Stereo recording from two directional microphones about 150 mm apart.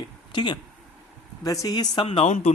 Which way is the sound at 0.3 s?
30° left (ahead or behind).